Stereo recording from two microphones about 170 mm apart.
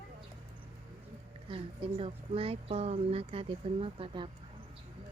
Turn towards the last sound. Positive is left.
turn(degrees=-35)  # may be behind; listen again after turning